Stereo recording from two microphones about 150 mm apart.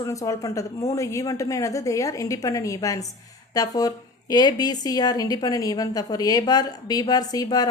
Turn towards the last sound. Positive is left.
turn(degrees=25)  # may be behind; listen again after turning